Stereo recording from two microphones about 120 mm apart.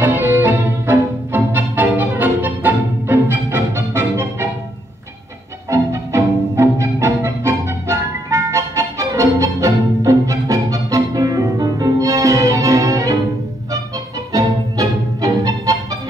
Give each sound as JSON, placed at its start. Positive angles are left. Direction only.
{"t": 0.0, "sound": "music", "side_deg": -20}
{"t": 5.7, "sound": "music", "side_deg": -25}
{"t": 14.3, "sound": "music", "side_deg": -30}